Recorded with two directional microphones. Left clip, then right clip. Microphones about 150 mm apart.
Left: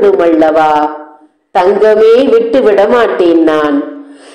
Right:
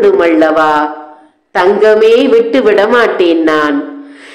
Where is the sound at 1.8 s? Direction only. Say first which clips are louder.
Left 1 dB; centre (ahead or behind).